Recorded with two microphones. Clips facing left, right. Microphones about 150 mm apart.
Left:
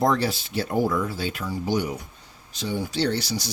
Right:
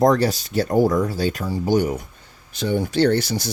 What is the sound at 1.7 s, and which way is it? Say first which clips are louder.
Speech: right 7 dB; 45° right (ahead or behind).